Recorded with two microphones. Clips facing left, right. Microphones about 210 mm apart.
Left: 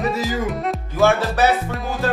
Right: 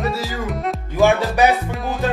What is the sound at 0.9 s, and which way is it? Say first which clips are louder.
Music: right 2 dB; 15° right (ahead or behind).